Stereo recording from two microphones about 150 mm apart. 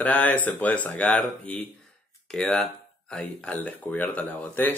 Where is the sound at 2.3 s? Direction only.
5° left (ahead or behind).